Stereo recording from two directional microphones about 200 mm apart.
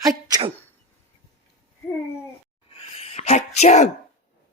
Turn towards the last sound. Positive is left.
turn(degrees=35)  # may be behind; listen again after turning